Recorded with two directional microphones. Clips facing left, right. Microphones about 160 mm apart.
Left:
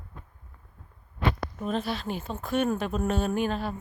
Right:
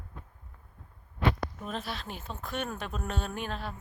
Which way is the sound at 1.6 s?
Centre (ahead or behind).